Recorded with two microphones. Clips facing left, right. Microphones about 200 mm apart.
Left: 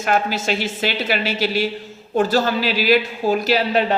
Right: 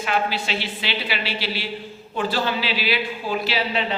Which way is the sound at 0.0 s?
45° left (ahead or behind).